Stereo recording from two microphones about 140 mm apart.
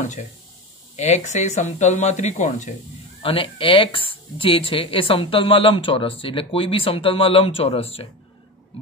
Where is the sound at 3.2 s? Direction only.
40° left (ahead or behind).